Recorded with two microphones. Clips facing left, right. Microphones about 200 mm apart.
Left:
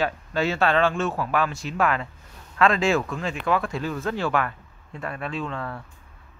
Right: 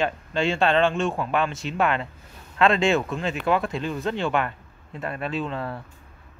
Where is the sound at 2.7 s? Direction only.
Centre (ahead or behind).